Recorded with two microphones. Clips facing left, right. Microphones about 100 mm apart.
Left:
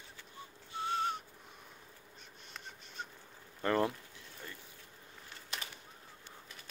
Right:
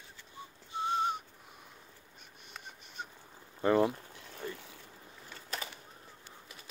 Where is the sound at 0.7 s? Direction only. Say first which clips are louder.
Right 3 dB; 20° right (ahead or behind).